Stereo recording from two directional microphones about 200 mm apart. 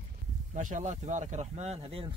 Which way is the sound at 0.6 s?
40° right (ahead or behind).